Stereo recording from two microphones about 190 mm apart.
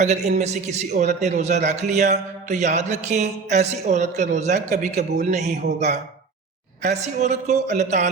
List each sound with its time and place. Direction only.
0.0 s a man's voice: 40° right (ahead or behind)